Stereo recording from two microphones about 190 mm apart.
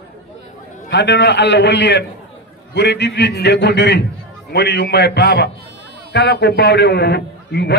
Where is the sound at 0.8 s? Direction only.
65° left (ahead or behind).